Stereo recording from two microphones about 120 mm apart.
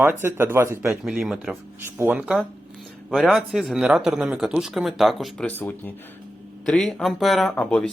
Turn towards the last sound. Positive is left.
turn(degrees=10)  # may be behind; listen again after turning